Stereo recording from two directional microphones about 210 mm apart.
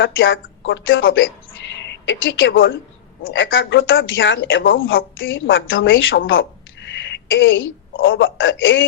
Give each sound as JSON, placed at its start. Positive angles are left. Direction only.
{"t": 0.0, "sound": "a woman's voice", "side_deg": 65}